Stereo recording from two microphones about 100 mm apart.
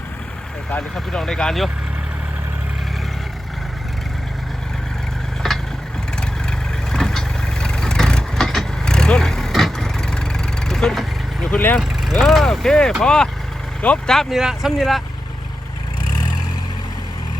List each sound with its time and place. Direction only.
0.9 s speech: 5° left (ahead or behind)
5.4 s vehicle: 5° left (ahead or behind)
6.9 s vehicle: 5° left (ahead or behind)
11.5 s speech: 20° left (ahead or behind)
12.2 s speech: centre (ahead or behind)